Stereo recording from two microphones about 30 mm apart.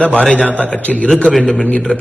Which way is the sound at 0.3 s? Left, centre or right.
Left.